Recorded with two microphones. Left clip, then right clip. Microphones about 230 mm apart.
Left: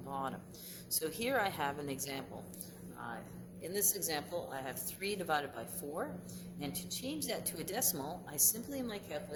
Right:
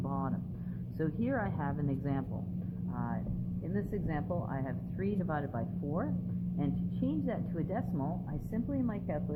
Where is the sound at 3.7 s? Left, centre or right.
Left.